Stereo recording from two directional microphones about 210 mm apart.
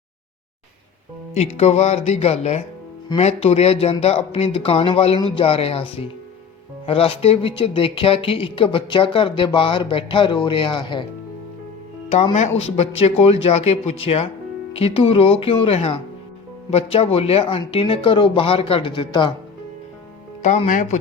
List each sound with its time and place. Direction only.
1.3 s speech: 30° left (ahead or behind)
12.1 s speech: 30° left (ahead or behind)
20.4 s speech: 35° left (ahead or behind)